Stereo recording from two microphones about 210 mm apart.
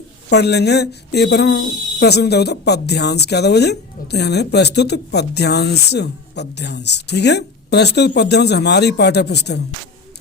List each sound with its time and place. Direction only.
0.3 s speech: 50° left (ahead or behind)